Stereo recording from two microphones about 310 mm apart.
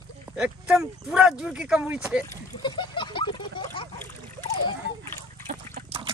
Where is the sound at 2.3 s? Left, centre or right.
Centre.